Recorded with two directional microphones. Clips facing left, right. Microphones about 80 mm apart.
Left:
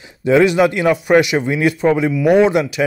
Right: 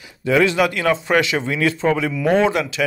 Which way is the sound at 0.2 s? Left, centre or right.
Left.